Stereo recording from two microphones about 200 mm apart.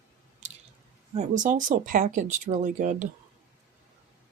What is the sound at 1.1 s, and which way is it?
Speech, 35° right (ahead or behind).